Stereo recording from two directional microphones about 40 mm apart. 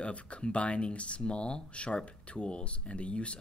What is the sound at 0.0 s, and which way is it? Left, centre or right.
Speech, left.